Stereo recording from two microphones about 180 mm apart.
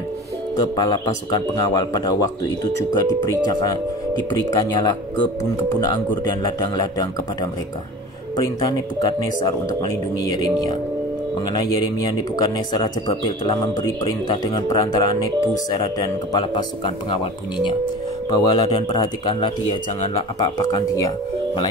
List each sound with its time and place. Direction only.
0.6 s speech: 25° left (ahead or behind)
8.4 s speech: 25° left (ahead or behind)